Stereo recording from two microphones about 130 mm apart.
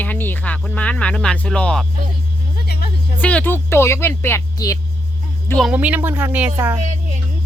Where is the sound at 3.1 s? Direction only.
10° left (ahead or behind).